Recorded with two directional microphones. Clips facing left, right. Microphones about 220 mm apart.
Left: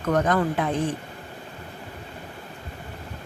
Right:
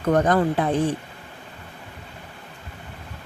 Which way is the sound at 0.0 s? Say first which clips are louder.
Right 3 dB; 30° right (ahead or behind).